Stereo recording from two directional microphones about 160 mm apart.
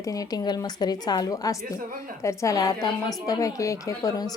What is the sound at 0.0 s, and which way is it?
Speech, 20° left (ahead or behind).